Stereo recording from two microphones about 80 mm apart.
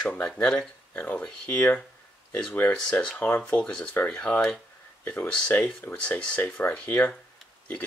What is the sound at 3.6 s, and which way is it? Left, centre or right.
Speech, centre.